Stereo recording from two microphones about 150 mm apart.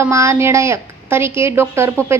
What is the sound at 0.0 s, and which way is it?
A woman's voice, 20° right (ahead or behind).